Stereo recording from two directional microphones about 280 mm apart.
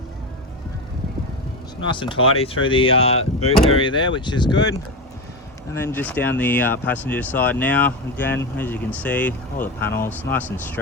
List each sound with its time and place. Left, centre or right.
1.9 s speech: centre
5.7 s speech: centre